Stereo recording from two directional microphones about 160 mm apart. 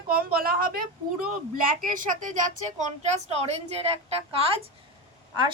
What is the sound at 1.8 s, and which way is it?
Speech, 55° right (ahead or behind).